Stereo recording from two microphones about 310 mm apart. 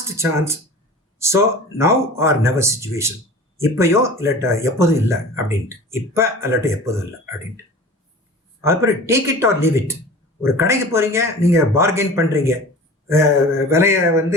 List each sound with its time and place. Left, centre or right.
0.2 s speech: centre
8.6 s speech: centre